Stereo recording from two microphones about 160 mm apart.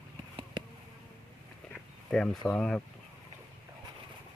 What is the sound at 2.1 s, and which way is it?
Speech, 5° left (ahead or behind).